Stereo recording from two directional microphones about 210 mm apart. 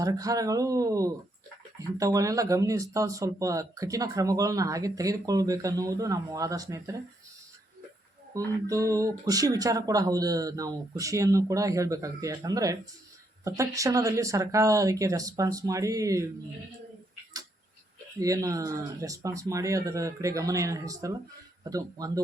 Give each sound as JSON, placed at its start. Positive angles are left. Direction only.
{"t": 0.0, "sound": "speech", "side_deg": -15}
{"t": 8.6, "sound": "speech", "side_deg": -15}
{"t": 18.2, "sound": "speech", "side_deg": -15}